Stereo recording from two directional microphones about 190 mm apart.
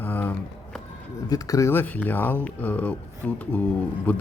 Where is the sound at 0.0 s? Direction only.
10° left (ahead or behind).